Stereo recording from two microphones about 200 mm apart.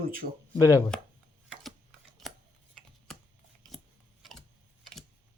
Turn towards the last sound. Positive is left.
turn(degrees=0)  # may be behind; listen again after turning